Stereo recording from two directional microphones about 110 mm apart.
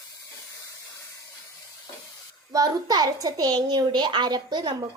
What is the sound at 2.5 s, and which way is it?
A child's voice, 35° right (ahead or behind).